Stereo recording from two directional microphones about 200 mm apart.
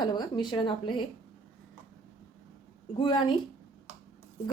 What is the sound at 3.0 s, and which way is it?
Speech, 25° left (ahead or behind).